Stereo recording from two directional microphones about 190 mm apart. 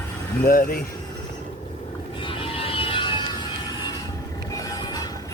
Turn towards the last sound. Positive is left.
turn(degrees=20)  # may be behind; listen again after turning